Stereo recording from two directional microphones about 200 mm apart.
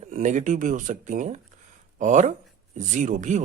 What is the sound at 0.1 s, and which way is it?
Speech, 40° right (ahead or behind).